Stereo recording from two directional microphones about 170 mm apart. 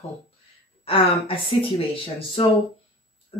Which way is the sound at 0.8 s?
35° left (ahead or behind).